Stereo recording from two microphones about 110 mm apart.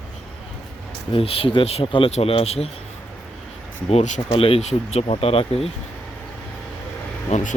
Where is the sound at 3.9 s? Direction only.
85° left; by 5.7 s 65° left (ahead or behind).